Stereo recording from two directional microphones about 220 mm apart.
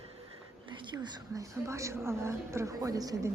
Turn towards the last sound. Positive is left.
turn(degrees=-15)  # may be behind; listen again after turning